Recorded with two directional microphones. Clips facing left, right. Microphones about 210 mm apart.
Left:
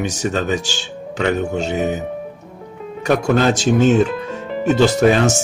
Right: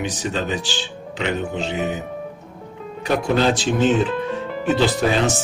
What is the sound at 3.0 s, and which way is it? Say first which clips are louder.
Speech: left 3 dB; 50° left (ahead or behind).